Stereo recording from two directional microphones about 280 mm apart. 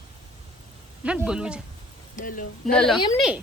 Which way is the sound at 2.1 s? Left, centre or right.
Left.